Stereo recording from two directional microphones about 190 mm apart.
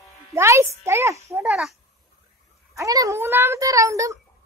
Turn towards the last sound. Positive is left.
turn(degrees=-15)  # may be behind; listen again after turning